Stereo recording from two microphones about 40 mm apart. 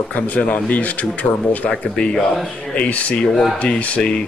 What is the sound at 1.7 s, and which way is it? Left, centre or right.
Speech, left.